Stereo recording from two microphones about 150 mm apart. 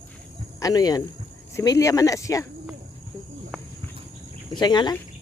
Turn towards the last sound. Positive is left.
turn(degrees=30)  # may be behind; listen again after turning